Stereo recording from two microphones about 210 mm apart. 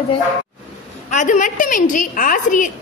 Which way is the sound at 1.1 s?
35° left (ahead or behind).